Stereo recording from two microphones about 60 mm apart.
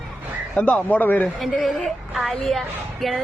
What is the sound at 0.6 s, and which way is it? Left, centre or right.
Speech, left.